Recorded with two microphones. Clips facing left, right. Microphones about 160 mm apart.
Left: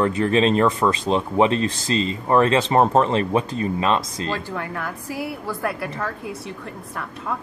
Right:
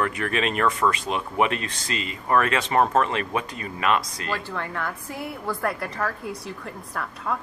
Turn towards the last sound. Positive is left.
turn(degrees=0)  # may be behind; listen again after turning